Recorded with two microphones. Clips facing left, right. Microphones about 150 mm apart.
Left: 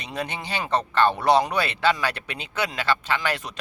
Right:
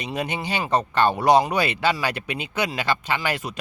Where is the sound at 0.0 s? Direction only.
10° right (ahead or behind).